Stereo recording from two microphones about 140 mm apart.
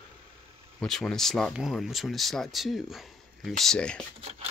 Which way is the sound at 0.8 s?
5° left (ahead or behind).